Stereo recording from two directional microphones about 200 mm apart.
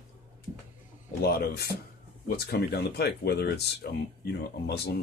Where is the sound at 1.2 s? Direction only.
50° left (ahead or behind).